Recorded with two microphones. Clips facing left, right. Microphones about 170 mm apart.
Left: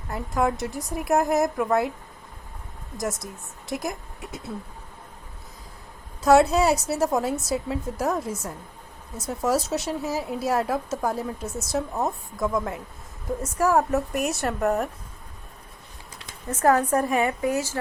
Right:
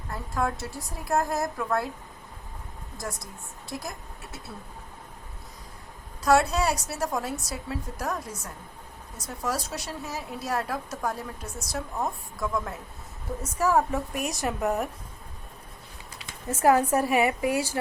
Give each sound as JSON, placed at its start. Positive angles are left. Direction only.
{"t": 0.1, "sound": "a woman's voice", "side_deg": 20}
{"t": 3.0, "sound": "a woman's voice", "side_deg": 20}
{"t": 6.2, "sound": "a woman's voice", "side_deg": 25}
{"t": 13.6, "sound": "a woman's voice", "side_deg": 10}
{"t": 16.5, "sound": "a woman's voice", "side_deg": -10}